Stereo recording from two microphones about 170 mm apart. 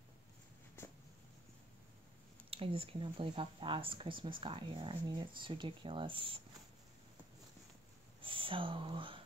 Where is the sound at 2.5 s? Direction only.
35° right (ahead or behind).